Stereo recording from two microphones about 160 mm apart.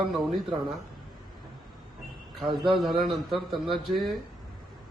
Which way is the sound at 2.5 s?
30° right (ahead or behind).